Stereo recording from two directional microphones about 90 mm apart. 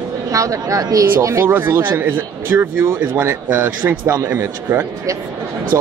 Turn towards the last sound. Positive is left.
turn(degrees=-30)  # may be behind; listen again after turning